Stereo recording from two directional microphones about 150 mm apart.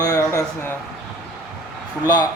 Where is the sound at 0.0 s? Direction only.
20° left (ahead or behind).